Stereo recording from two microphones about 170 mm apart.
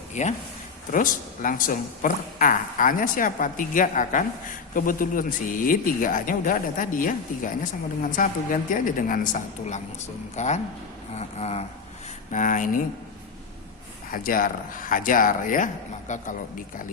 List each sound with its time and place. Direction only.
0.1 s a man's voice: 45° left (ahead or behind)
11.1 s a sound: 40° left (ahead or behind)
12.3 s a woman's voice: 50° left (ahead or behind)
14.1 s a woman's voice: 55° left (ahead or behind)